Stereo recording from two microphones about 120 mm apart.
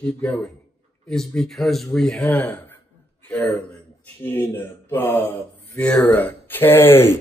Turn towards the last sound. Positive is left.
turn(degrees=20)  # may be behind; listen again after turning